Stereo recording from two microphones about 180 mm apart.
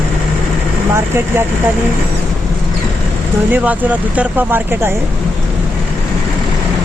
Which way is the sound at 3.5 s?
10° right (ahead or behind).